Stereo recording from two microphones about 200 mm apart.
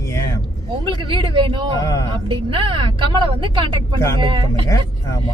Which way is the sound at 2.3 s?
25° right (ahead or behind).